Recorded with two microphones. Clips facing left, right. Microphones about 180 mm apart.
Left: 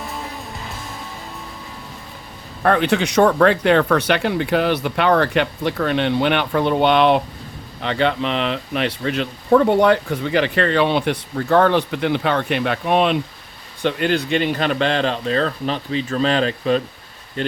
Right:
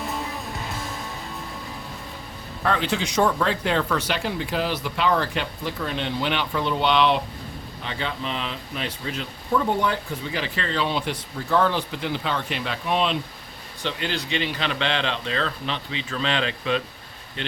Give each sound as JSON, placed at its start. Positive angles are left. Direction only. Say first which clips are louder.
{"t": 2.6, "sound": "speech", "louder": "left 7 dB", "side_deg": 60}
{"t": 7.8, "sound": "speech", "louder": "left 11 dB", "side_deg": 70}